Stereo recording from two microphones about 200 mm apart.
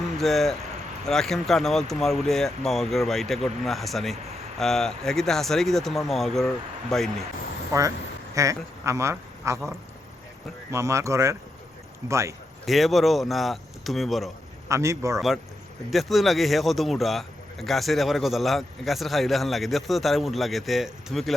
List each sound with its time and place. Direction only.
0.2 s speech: centre (ahead or behind)
7.7 s speech: 15° right (ahead or behind)
10.7 s speech: 15° right (ahead or behind)
12.6 s speech: centre (ahead or behind)
14.7 s speech: 15° right (ahead or behind)
15.9 s speech: centre (ahead or behind)